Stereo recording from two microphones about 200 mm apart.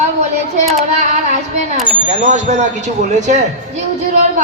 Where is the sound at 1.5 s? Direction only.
35° right (ahead or behind).